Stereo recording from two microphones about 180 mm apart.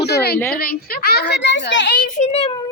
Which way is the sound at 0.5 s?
55° left (ahead or behind).